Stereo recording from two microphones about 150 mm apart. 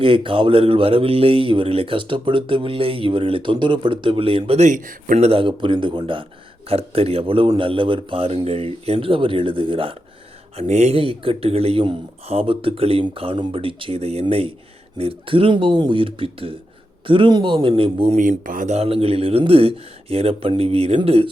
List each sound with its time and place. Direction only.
0.0 s speech: 35° right (ahead or behind)
10.6 s speech: 45° right (ahead or behind)
18.2 s speech: 60° right (ahead or behind); by 21.2 s 40° right (ahead or behind)